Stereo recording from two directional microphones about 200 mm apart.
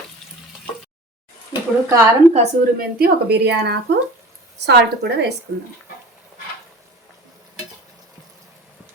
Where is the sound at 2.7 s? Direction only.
50° right (ahead or behind).